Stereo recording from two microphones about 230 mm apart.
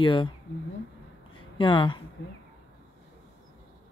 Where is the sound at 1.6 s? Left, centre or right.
Left.